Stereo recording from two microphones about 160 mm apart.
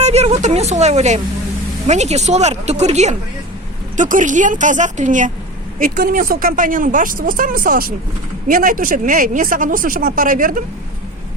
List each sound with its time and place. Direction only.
0.0 s a woman's voice: 45° right (ahead or behind)